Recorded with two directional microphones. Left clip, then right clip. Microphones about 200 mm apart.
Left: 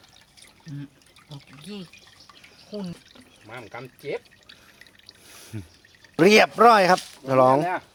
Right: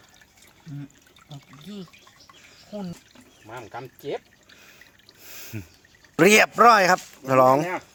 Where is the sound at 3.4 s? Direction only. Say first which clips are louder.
Right 1 dB; 35° right (ahead or behind).